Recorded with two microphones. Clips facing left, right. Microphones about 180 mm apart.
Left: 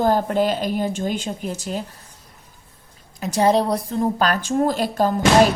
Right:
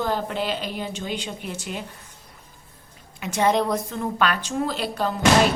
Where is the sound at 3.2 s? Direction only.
35° left (ahead or behind).